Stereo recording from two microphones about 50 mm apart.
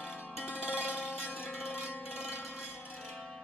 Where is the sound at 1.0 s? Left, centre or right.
Left.